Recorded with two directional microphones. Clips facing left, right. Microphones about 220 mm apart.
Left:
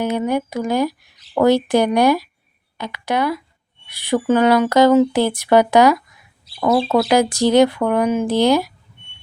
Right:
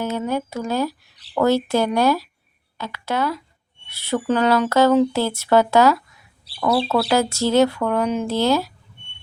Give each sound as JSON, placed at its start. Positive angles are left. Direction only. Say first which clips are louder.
{"t": 0.0, "sound": "speech", "louder": "left 4 dB", "side_deg": 15}